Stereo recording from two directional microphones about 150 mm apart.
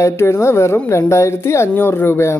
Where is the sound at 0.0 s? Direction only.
15° left (ahead or behind).